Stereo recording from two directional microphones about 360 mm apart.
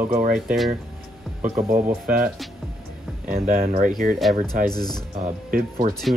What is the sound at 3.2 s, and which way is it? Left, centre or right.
Speech, right.